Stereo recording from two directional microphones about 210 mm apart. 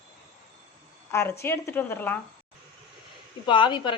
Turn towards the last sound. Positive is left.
turn(degrees=20)  # may be behind; listen again after turning